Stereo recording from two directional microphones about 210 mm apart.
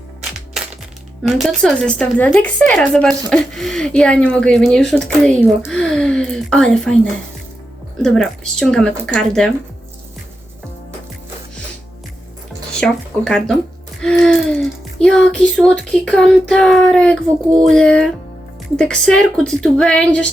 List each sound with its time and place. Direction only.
1.4 s speech: centre (ahead or behind)
12.8 s speech: 5° left (ahead or behind)